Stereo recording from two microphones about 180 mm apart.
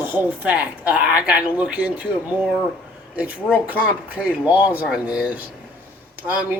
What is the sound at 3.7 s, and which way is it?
A man's voice, 10° right (ahead or behind).